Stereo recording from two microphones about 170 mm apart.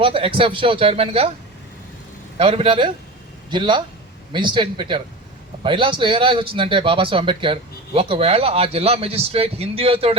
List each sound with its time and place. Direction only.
0.0 s a man's voice: 30° right (ahead or behind)
2.4 s a man's voice: 30° right (ahead or behind)